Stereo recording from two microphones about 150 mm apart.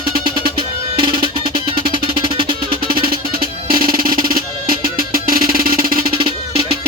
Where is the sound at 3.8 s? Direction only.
70° right (ahead or behind).